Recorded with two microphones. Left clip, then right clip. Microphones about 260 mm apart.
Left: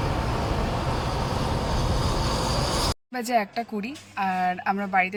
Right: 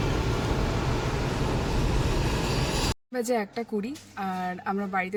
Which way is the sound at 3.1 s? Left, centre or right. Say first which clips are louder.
Left 3 dB; centre.